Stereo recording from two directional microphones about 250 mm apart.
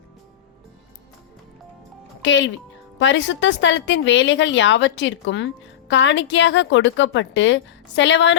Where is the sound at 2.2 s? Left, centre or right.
Left.